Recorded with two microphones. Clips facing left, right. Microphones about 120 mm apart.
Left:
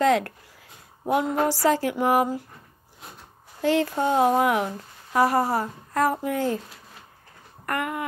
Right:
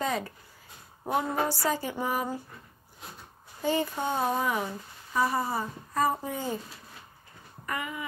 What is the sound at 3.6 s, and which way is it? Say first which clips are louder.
A woman's voice: left 6 dB; 80° left.